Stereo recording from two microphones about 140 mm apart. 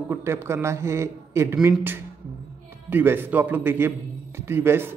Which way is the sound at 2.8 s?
15° right (ahead or behind).